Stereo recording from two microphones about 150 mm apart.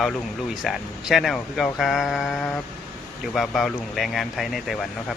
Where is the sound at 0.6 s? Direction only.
Centre (ahead or behind).